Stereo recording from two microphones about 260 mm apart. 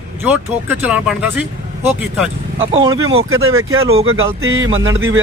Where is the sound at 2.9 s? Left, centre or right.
Right.